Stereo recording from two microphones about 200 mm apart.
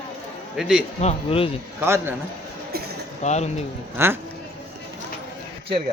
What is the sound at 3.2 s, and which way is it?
Speech, 35° left (ahead or behind).